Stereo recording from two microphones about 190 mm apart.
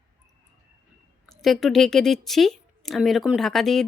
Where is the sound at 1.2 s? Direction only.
Centre (ahead or behind).